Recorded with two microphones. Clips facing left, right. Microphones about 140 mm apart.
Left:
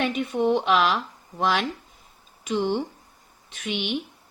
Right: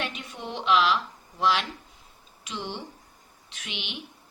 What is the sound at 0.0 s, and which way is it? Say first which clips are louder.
Speech: left 12 dB; 55° left (ahead or behind).